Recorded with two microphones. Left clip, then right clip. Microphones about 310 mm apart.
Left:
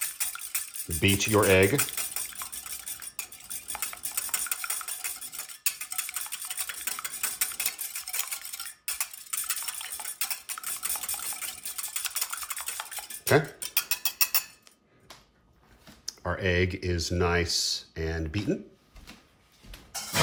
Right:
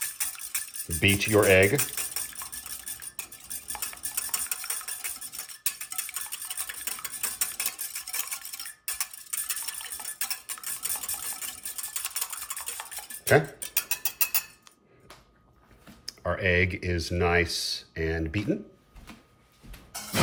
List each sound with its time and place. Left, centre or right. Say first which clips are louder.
0.0 s music: even; centre
1.1 s a sound: right 2 dB; centre
16.0 s speech: right 3 dB; centre